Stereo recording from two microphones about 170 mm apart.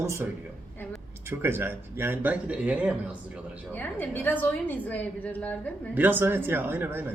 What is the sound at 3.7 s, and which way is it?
A woman's voice, 10° left (ahead or behind).